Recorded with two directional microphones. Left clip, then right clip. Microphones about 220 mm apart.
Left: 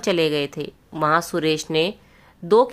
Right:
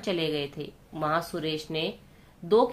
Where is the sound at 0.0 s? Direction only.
45° left (ahead or behind).